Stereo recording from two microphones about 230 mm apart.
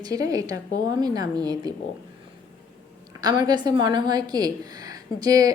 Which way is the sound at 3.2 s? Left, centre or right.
Centre.